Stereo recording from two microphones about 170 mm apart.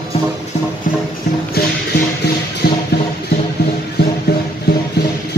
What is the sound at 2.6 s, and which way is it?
Music, 75° left (ahead or behind).